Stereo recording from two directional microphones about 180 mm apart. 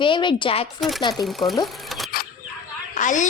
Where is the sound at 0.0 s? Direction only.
25° left (ahead or behind).